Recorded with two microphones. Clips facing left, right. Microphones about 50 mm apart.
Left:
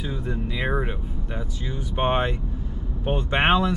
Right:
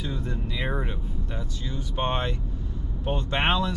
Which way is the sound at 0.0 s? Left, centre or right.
Centre.